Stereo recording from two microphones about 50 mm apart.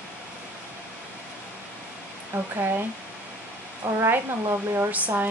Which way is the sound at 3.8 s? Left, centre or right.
Right.